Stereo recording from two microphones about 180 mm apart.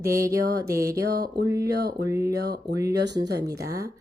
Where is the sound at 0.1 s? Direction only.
15° right (ahead or behind).